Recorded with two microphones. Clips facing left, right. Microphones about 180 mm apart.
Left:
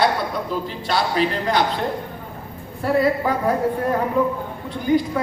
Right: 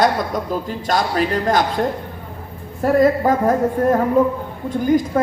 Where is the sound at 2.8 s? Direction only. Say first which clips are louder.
Right 4 dB; 45° right (ahead or behind).